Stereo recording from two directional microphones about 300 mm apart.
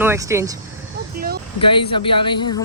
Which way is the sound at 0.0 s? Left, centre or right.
Centre.